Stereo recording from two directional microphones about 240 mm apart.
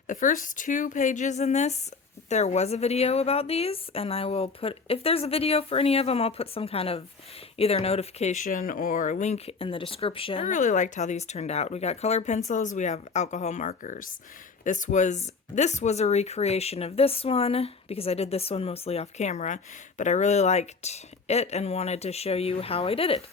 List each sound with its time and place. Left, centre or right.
0.1 s speech: left